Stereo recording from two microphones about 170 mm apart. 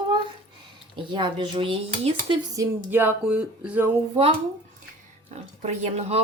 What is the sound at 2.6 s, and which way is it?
Music, 10° right (ahead or behind).